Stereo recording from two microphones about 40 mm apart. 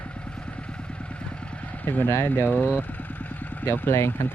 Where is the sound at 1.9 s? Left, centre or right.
Left.